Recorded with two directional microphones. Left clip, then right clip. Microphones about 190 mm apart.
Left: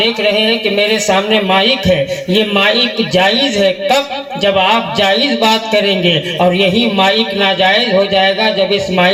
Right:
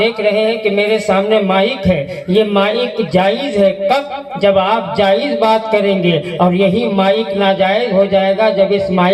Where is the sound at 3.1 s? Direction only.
40° left (ahead or behind).